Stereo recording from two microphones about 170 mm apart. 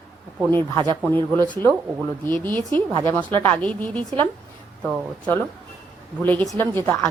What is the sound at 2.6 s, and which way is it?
Speech, 25° right (ahead or behind).